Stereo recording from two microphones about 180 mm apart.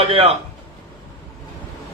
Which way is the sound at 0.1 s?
35° right (ahead or behind).